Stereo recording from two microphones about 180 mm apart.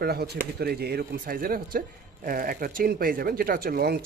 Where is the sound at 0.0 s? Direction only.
60° right (ahead or behind).